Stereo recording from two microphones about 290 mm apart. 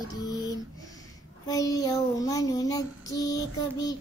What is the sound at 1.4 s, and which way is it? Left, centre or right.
Child singing, centre.